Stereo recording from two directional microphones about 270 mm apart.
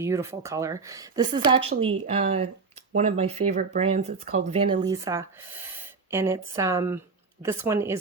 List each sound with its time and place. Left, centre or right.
0.0 s speech: centre